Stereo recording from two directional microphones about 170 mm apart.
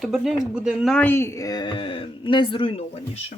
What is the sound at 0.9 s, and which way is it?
Speech, 10° left (ahead or behind).